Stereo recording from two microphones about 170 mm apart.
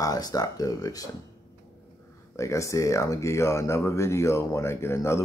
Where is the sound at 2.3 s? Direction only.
20° left (ahead or behind).